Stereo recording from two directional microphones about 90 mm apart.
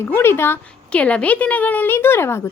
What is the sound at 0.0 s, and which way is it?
Speech, 25° left (ahead or behind).